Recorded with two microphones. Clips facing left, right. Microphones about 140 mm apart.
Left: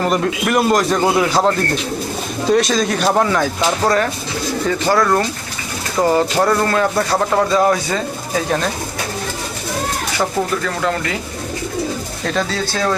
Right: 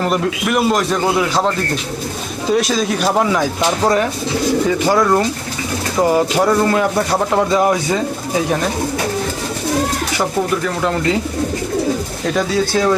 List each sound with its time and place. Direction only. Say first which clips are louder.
0.0 s a man's voice: even; centre (ahead or behind)
10.6 s speech: right 2 dB; 20° right (ahead or behind)
12.2 s speech: right 3 dB; 10° right (ahead or behind)